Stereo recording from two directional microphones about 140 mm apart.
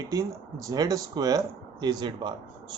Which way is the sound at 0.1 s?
25° right (ahead or behind).